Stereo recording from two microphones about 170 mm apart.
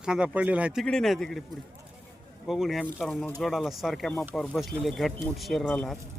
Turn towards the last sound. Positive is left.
turn(degrees=0)  # may be behind; listen again after turning